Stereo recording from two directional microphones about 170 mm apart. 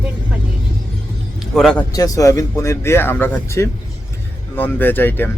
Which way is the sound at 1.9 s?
20° left (ahead or behind).